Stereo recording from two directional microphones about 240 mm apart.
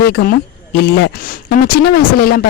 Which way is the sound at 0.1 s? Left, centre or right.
Left.